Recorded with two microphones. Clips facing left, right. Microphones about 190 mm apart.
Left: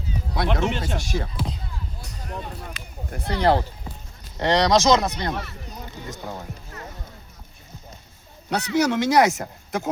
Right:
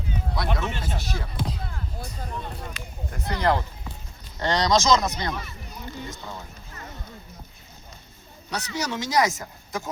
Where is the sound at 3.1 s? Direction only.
35° left (ahead or behind).